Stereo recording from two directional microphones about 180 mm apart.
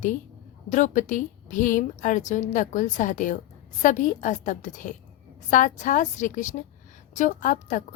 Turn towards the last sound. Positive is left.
turn(degrees=45)  # may be behind; listen again after turning